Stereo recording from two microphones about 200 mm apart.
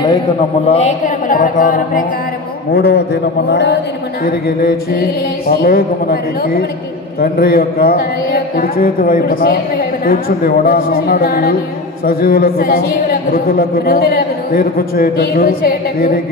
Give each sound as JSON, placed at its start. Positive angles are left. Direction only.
{"t": 0.7, "sound": "speech", "side_deg": 30}
{"t": 2.7, "sound": "a man's voice", "side_deg": 55}
{"t": 4.5, "sound": "a man's voice", "side_deg": 50}